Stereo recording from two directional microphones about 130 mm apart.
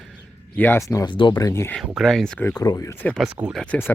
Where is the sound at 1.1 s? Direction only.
40° left (ahead or behind).